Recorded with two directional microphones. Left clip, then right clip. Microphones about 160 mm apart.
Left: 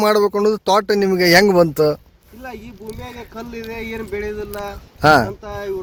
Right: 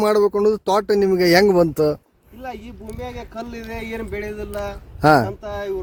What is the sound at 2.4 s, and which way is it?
Speech, 45° right (ahead or behind).